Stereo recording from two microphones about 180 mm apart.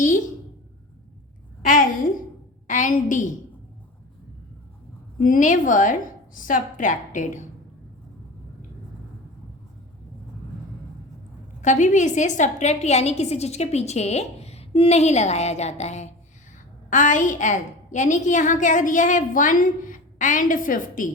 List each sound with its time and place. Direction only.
2.6 s a woman's voice: 45° left (ahead or behind)
5.2 s a woman's voice: 45° left (ahead or behind)
11.6 s a woman's voice: 40° left (ahead or behind)